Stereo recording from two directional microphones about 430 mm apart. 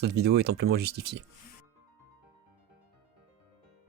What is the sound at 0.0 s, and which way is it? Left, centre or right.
Speech, right.